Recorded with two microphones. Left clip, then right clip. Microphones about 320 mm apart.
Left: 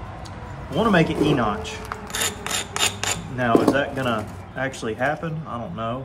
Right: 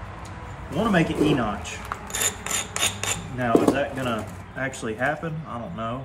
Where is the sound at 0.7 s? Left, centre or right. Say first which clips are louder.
Left 3 dB; centre.